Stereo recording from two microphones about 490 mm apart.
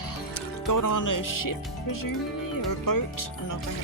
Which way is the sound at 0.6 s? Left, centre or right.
Left.